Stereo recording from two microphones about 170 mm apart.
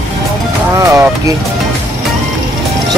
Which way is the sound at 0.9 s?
20° right (ahead or behind).